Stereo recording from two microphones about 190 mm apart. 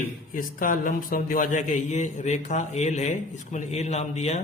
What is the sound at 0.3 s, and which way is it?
Speech, 45° left (ahead or behind).